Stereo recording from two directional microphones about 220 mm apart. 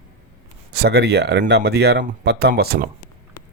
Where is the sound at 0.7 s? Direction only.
45° right (ahead or behind).